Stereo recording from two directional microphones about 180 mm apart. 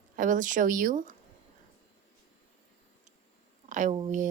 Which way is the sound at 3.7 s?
45° right (ahead or behind).